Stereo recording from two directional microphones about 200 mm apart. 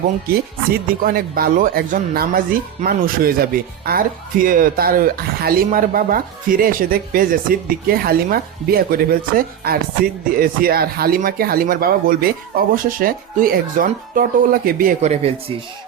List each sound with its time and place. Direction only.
1.0 s speech: 45° right (ahead or behind)